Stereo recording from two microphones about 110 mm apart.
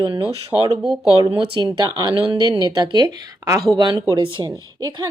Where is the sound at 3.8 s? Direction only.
45° right (ahead or behind).